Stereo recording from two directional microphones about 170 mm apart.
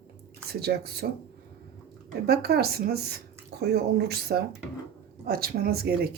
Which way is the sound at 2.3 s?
65° right (ahead or behind).